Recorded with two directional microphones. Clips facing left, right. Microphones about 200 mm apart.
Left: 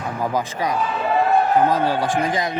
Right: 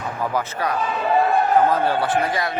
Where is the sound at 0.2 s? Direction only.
15° left (ahead or behind).